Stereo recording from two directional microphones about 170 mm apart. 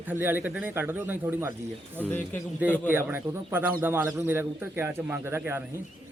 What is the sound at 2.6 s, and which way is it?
Speech, 10° right (ahead or behind).